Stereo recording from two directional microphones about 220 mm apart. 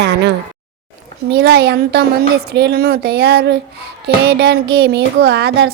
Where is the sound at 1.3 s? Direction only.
45° right (ahead or behind).